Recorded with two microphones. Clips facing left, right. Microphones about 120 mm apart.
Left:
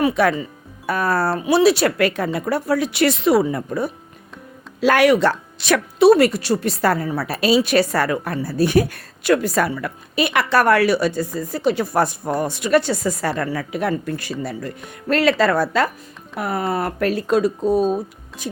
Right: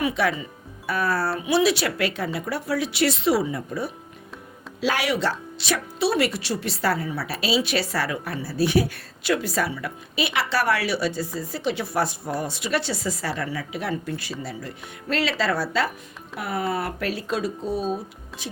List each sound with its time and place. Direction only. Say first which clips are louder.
0.0 s a woman's voice: left 6 dB; 50° left (ahead or behind)